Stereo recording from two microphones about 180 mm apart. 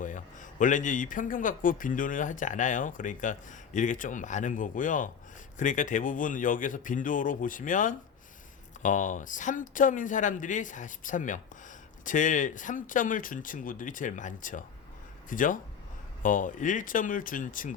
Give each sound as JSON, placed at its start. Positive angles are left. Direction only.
{"t": 0.0, "sound": "a man's voice", "side_deg": 45}